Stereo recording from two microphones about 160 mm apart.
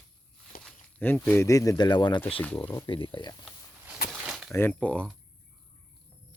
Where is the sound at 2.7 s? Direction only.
30° left (ahead or behind).